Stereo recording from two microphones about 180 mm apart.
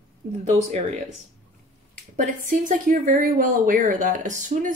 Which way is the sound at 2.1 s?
45° right (ahead or behind).